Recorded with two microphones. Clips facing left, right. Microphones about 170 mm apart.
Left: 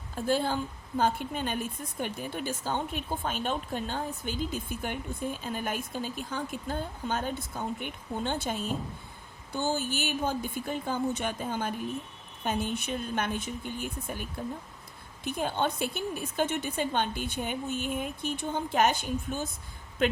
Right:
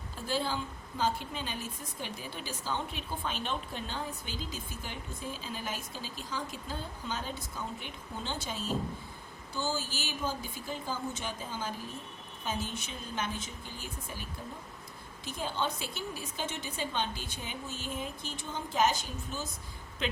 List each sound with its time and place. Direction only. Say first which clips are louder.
0.3 s a woman's voice: left 5 dB; 50° left (ahead or behind)